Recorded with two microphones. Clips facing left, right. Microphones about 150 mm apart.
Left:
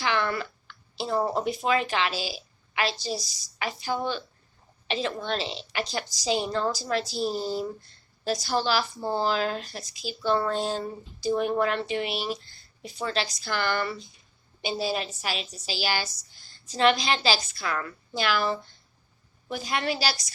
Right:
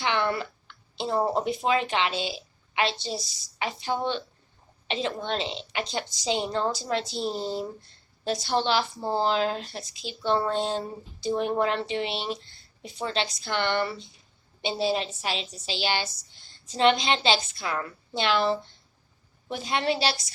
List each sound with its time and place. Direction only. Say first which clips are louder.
0.0 s a woman's voice: right 1 dB; 25° right (ahead or behind)